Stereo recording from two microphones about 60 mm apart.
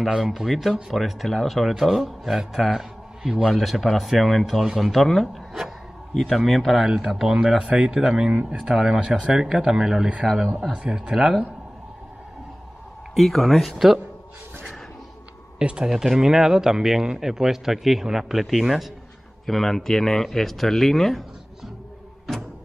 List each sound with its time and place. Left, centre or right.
0.1 s a man's voice: centre
10.7 s speech: centre
13.1 s a man's voice: centre
15.6 s a man's voice: centre